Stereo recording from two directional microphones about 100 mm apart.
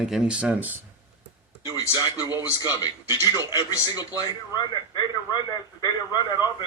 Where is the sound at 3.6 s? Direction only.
40° left (ahead or behind).